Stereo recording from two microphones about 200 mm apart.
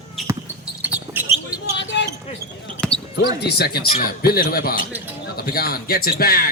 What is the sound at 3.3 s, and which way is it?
Speech, 55° left (ahead or behind).